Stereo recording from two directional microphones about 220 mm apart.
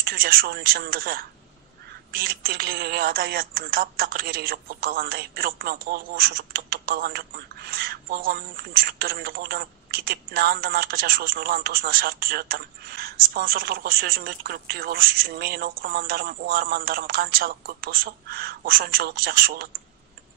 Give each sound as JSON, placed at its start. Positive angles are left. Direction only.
{"t": 0.0, "sound": "speech", "side_deg": -45}